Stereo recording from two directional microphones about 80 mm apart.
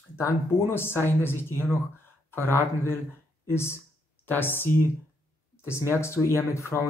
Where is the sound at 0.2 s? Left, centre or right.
Left.